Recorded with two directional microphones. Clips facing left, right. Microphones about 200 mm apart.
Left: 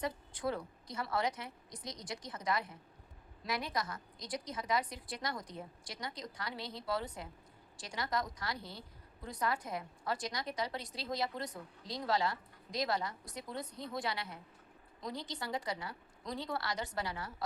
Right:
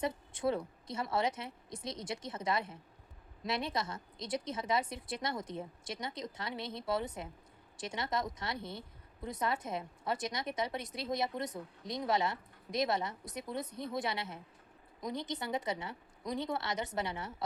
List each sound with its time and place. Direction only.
0.0 s a woman's voice: 25° right (ahead or behind)